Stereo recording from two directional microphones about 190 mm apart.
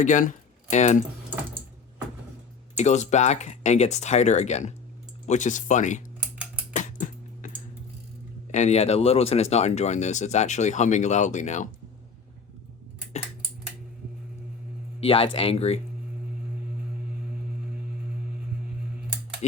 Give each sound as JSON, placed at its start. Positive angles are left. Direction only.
{"t": 0.0, "sound": "speech", "side_deg": 40}
{"t": 2.7, "sound": "speech", "side_deg": 40}
{"t": 6.7, "sound": "music", "side_deg": 40}
{"t": 8.5, "sound": "speech", "side_deg": 35}
{"t": 15.0, "sound": "speech", "side_deg": 30}